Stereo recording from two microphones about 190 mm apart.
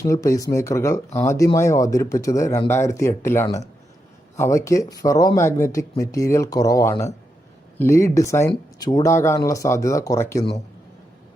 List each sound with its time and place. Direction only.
0.0 s speech: 15° left (ahead or behind)